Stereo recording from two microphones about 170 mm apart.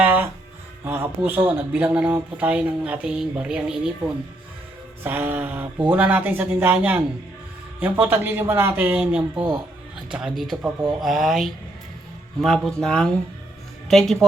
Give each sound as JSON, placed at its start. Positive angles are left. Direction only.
{"t": 0.0, "sound": "music", "side_deg": -10}
{"t": 0.9, "sound": "speech", "side_deg": -10}
{"t": 5.0, "sound": "speech", "side_deg": -10}